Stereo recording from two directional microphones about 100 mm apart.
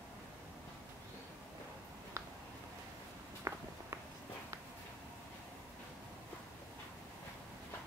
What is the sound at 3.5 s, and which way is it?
Walk, 30° right (ahead or behind).